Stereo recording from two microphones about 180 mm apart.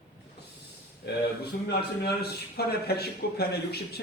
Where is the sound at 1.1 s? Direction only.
60° left (ahead or behind).